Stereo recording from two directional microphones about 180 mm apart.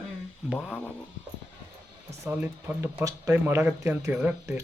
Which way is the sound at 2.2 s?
10° right (ahead or behind).